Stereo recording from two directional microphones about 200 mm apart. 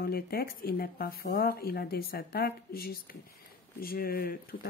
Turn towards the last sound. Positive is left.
turn(degrees=50)  # may be behind; listen again after turning